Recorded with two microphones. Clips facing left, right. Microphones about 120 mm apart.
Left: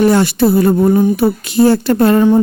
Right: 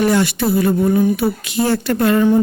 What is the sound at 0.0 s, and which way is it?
A woman's voice, 35° left (ahead or behind).